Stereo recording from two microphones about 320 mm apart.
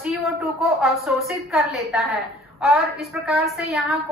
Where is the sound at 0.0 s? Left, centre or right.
Centre.